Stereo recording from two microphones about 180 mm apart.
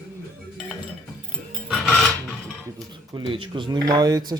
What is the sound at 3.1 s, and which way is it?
Speech, 30° right (ahead or behind).